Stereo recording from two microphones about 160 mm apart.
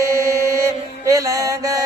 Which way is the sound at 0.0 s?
20° right (ahead or behind).